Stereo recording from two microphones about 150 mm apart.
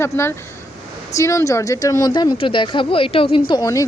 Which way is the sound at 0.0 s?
20° left (ahead or behind).